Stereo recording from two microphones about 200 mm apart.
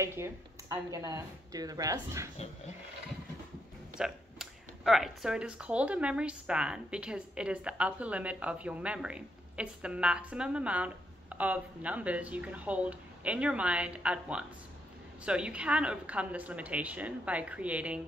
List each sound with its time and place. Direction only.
0.0 s a woman's voice: 15° right (ahead or behind)
4.0 s a woman's voice: centre (ahead or behind)